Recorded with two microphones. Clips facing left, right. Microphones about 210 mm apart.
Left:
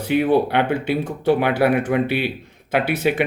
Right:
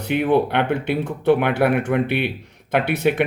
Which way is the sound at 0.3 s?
5° left (ahead or behind).